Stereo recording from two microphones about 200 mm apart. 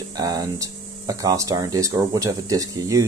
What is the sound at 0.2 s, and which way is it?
Speech, 20° right (ahead or behind).